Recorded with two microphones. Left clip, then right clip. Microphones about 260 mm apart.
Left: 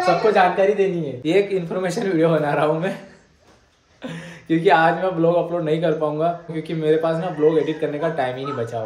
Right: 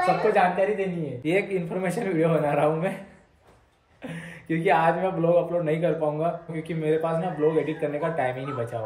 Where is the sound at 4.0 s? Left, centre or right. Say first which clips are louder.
Left 4 dB; centre.